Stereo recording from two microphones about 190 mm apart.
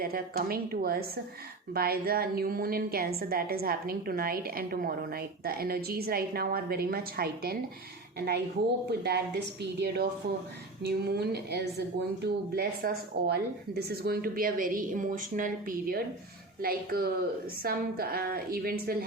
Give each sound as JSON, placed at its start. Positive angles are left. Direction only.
{"t": 0.0, "sound": "a woman's voice", "side_deg": -50}
{"t": 8.9, "sound": "a woman's voice", "side_deg": -60}